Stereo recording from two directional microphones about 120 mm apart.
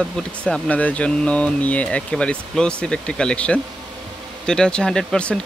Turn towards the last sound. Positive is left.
turn(degrees=5)  # may be behind; listen again after turning